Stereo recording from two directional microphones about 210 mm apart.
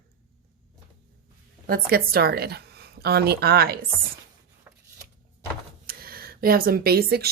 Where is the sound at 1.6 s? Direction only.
45° right (ahead or behind).